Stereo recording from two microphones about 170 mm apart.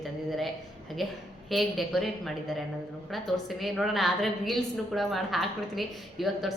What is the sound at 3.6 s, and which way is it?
A woman's voice, centre (ahead or behind).